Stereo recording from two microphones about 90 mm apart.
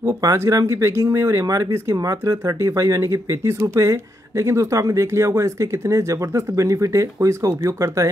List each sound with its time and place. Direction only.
0.2 s speech: 35° right (ahead or behind)